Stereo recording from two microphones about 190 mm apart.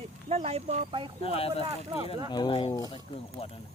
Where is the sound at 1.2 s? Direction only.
30° left (ahead or behind).